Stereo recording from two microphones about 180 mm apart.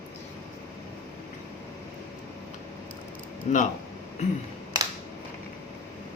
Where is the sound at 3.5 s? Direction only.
40° left (ahead or behind).